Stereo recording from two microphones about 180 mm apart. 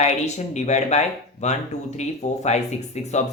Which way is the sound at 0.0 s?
40° left (ahead or behind).